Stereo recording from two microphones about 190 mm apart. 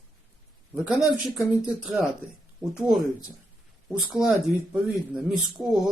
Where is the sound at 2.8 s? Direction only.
5° right (ahead or behind).